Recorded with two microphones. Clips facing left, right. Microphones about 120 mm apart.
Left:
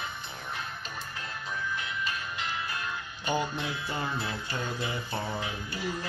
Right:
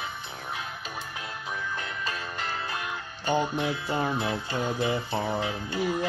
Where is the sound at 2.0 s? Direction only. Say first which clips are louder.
Right 2 dB; 40° right (ahead or behind).